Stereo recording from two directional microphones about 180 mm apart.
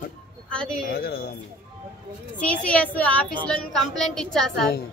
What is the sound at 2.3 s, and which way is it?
A woman's voice, 5° left (ahead or behind).